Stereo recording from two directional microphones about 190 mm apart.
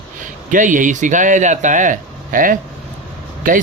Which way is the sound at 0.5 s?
40° right (ahead or behind).